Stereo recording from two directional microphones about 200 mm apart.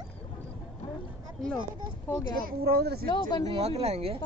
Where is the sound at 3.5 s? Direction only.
30° right (ahead or behind).